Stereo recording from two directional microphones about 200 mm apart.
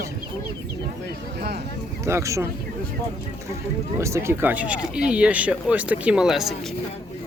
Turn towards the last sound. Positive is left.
turn(degrees=0)  # may be behind; listen again after turning